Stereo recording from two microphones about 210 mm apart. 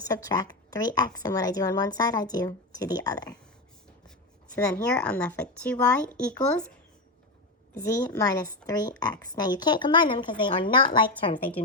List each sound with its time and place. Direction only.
0.1 s a woman's voice: 15° left (ahead or behind)
4.5 s a woman's voice: 10° left (ahead or behind)
7.8 s a woman's voice: 15° left (ahead or behind)